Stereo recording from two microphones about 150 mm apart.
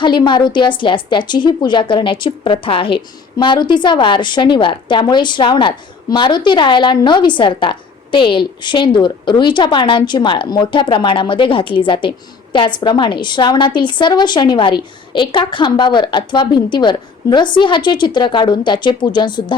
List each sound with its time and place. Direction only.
0.0 s a woman's voice: 30° left (ahead or behind)